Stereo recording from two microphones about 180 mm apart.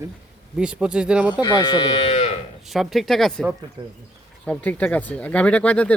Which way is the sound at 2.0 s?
40° left (ahead or behind).